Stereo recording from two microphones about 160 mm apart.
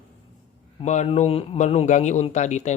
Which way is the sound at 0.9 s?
45° left (ahead or behind).